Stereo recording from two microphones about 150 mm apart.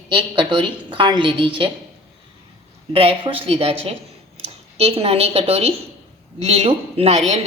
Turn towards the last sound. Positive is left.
turn(degrees=-45)  # may be behind; listen again after turning